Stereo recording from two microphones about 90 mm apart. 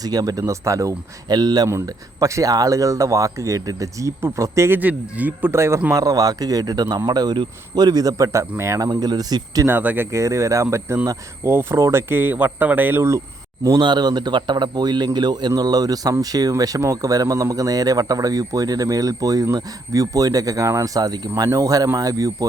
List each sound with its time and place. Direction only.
0.0 s speech: 45° right (ahead or behind)
1.6 s speech: 35° right (ahead or behind)
4.8 s speech: 15° right (ahead or behind)
5.9 s speech: 40° right (ahead or behind)
9.6 s speech: 20° right (ahead or behind)
10.1 s speech: 35° right (ahead or behind)
13.7 s speech: 55° right (ahead or behind)